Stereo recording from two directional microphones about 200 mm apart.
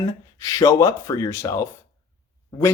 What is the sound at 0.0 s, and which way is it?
Speech, 15° left (ahead or behind).